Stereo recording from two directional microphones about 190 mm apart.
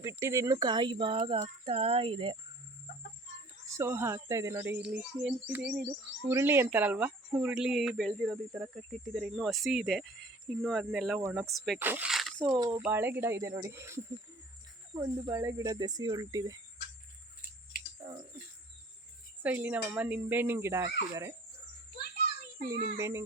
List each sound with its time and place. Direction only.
0.0 s speech: 15° right (ahead or behind)
3.8 s speech: 15° right (ahead or behind)
12.5 s speech: 20° right (ahead or behind)
18.0 s a sound: 15° right (ahead or behind)
19.4 s speech: 10° right (ahead or behind)
22.7 s speech: 15° right (ahead or behind)